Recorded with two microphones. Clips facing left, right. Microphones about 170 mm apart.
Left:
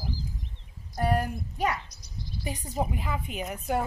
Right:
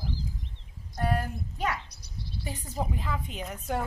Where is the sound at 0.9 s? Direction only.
15° left (ahead or behind).